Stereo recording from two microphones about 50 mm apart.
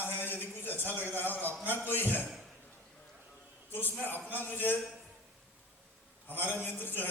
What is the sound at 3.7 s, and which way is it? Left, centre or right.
A man's voice, left.